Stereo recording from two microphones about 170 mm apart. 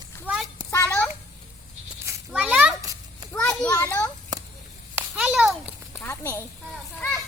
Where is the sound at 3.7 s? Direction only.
15° left (ahead or behind).